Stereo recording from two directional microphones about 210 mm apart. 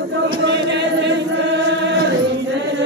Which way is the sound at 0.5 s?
55° right (ahead or behind).